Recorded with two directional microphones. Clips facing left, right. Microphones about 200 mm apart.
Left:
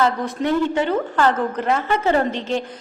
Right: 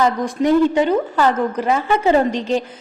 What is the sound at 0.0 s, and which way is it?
A woman's voice, 15° right (ahead or behind).